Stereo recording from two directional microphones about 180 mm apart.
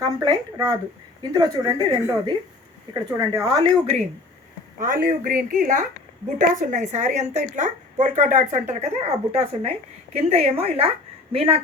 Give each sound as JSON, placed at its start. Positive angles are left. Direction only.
{"t": 0.0, "sound": "speech", "side_deg": -20}
{"t": 4.8, "sound": "a woman's voice", "side_deg": -50}